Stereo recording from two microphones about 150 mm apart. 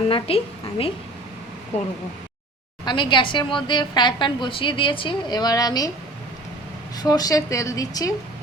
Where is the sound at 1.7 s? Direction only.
45° left (ahead or behind).